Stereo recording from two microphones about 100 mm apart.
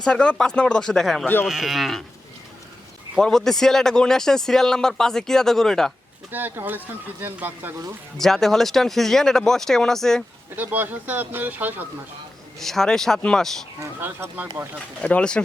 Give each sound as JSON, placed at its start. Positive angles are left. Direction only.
{"t": 0.0, "sound": "speech", "side_deg": 10}
{"t": 3.2, "sound": "speech", "side_deg": 5}
{"t": 6.3, "sound": "speech", "side_deg": -20}
{"t": 8.2, "sound": "speech", "side_deg": 5}
{"t": 10.5, "sound": "speech", "side_deg": -20}
{"t": 12.5, "sound": "speech", "side_deg": 5}
{"t": 13.7, "sound": "speech", "side_deg": -25}
{"t": 15.0, "sound": "speech", "side_deg": 10}